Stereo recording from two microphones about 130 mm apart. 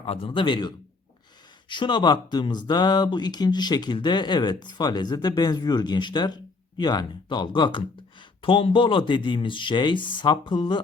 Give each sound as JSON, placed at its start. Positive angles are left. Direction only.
{"t": 0.0, "sound": "speech", "side_deg": 45}
{"t": 1.7, "sound": "speech", "side_deg": 35}